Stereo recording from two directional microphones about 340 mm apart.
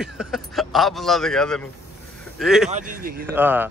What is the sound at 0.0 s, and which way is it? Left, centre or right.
A man's voice, centre.